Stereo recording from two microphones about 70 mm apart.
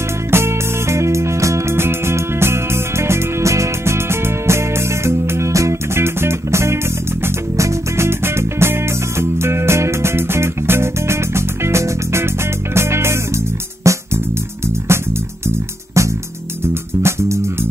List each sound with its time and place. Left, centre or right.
0.3 s music: right